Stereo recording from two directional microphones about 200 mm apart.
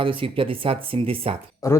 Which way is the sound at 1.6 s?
15° left (ahead or behind).